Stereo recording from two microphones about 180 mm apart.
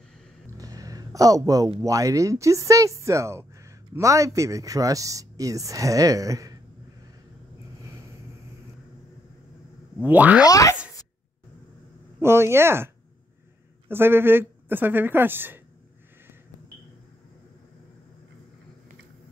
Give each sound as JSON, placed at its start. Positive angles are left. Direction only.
{"t": 0.6, "sound": "a sound", "side_deg": -20}
{"t": 1.8, "sound": "speech", "side_deg": -20}
{"t": 10.0, "sound": "speech", "side_deg": -10}
{"t": 10.4, "sound": "speech", "side_deg": 20}
{"t": 12.2, "sound": "speech", "side_deg": -15}